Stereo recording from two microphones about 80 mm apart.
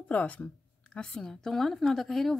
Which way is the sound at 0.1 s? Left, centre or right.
Centre.